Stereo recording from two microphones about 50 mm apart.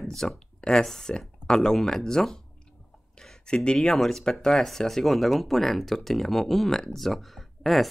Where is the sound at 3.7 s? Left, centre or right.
Centre.